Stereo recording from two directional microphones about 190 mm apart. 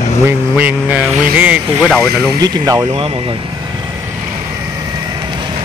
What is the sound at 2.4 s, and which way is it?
Speech, 20° right (ahead or behind).